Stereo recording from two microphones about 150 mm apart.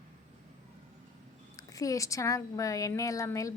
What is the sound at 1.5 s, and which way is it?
A woman's voice, 25° left (ahead or behind).